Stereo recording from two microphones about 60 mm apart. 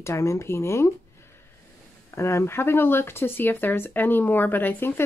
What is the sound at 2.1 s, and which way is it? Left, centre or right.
Speech, left.